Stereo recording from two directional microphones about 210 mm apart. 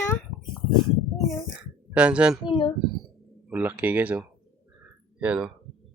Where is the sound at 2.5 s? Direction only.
20° left (ahead or behind).